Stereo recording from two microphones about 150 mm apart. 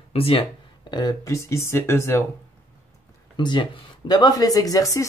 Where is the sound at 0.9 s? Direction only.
25° left (ahead or behind).